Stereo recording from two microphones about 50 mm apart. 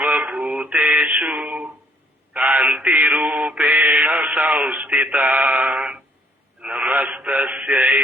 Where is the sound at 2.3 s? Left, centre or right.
Right.